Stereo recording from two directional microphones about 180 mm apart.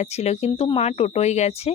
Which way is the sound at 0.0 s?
35° left (ahead or behind).